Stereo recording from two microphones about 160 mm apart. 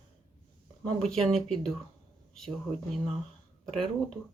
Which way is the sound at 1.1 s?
Centre (ahead or behind).